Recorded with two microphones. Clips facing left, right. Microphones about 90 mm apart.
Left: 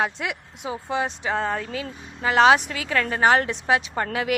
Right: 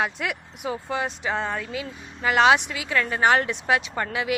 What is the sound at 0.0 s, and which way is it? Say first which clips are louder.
Speech: left 1 dB; 25° left (ahead or behind).